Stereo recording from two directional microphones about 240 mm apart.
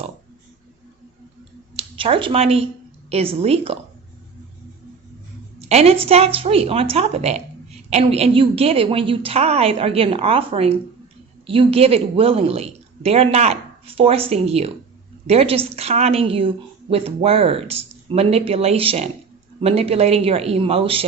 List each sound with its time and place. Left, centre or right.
1.7 s a woman's voice: right
5.5 s a woman's voice: right